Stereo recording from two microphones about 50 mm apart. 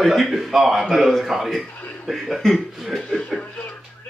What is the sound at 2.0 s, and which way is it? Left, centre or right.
Speech, centre.